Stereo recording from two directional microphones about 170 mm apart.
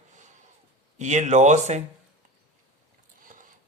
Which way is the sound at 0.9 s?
45° right (ahead or behind).